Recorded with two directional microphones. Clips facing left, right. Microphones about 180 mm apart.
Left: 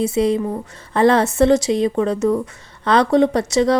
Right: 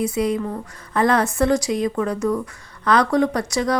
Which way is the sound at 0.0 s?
25° left (ahead or behind).